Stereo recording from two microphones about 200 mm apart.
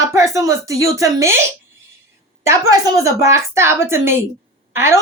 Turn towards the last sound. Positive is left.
turn(degrees=-15)  # may be behind; listen again after turning